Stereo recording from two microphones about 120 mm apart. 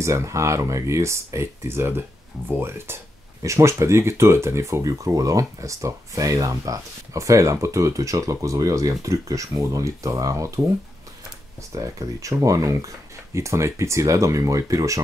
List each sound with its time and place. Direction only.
0.0 s speech: 25° right (ahead or behind)
11.7 s speech: 30° right (ahead or behind)